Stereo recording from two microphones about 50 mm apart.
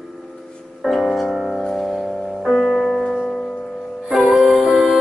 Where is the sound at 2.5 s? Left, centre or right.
Centre.